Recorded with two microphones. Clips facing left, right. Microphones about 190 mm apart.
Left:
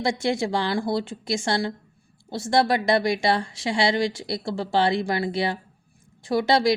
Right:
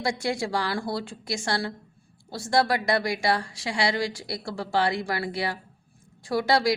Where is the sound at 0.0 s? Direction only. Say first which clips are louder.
Left 4 dB; 25° left (ahead or behind).